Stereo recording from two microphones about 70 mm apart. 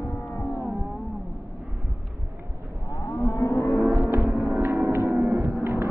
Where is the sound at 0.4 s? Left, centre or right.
Left.